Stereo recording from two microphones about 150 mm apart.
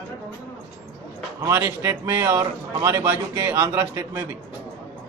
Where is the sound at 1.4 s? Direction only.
20° right (ahead or behind).